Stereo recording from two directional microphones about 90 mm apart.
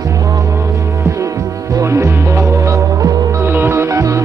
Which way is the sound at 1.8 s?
30° right (ahead or behind).